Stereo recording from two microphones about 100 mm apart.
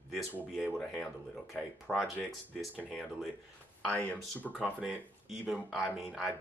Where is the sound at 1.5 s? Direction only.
Centre (ahead or behind).